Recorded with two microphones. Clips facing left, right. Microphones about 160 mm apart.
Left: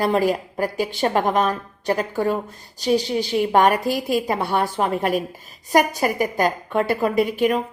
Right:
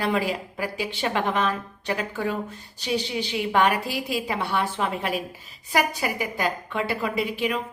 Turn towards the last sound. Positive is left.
turn(degrees=45)  # may be behind; listen again after turning